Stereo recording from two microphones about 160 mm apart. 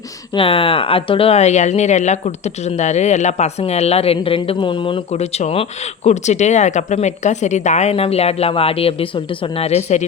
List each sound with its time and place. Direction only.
0.3 s speech: 35° left (ahead or behind)